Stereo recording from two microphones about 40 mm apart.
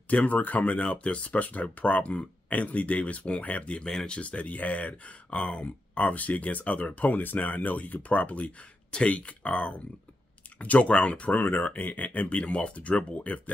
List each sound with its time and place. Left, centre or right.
0.1 s speech: left
11.3 s speech: left
11.8 s speech: left